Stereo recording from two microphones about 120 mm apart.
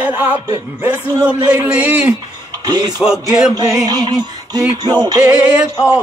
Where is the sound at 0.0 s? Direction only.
15° right (ahead or behind).